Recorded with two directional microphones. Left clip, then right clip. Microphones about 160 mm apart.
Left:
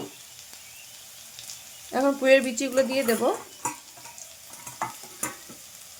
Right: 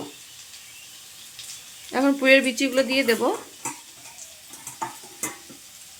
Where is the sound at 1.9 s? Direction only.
5° left (ahead or behind).